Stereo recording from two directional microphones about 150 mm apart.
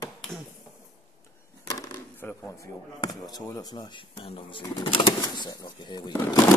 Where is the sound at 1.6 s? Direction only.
20° left (ahead or behind).